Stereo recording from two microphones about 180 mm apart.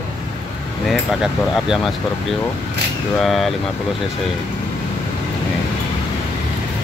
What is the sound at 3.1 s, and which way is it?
Speech, centre (ahead or behind).